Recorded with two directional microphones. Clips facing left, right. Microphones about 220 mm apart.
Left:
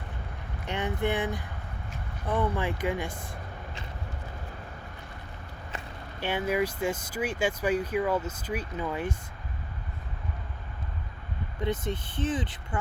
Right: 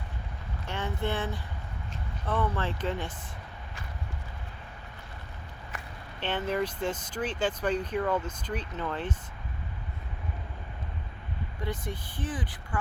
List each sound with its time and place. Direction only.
0.7 s speech: 15° left (ahead or behind)
6.1 s speech: 10° left (ahead or behind)
11.6 s speech: 20° left (ahead or behind)